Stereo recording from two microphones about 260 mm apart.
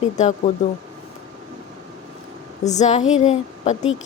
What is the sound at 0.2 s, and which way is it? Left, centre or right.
Speech, left.